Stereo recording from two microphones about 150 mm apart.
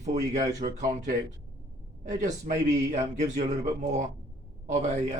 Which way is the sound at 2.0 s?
55° right (ahead or behind).